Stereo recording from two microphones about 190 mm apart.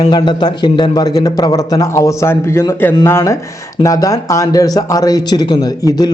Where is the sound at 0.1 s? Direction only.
20° left (ahead or behind).